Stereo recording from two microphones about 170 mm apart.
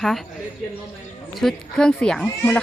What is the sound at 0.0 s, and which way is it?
Speech, centre (ahead or behind).